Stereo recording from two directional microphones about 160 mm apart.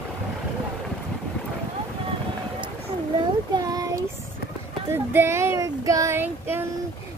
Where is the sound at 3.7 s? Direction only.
20° right (ahead or behind).